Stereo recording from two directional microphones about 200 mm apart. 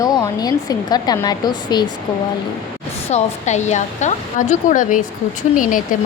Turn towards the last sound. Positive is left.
turn(degrees=40)  # may be behind; listen again after turning